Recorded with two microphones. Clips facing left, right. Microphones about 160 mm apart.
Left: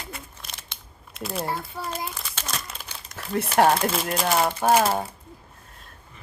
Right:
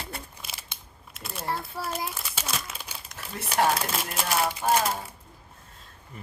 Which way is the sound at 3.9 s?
Centre (ahead or behind).